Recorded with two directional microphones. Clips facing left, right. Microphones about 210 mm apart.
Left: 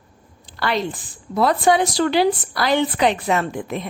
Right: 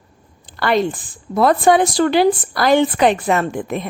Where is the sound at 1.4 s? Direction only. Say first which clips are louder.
Right 4 dB; 50° right (ahead or behind).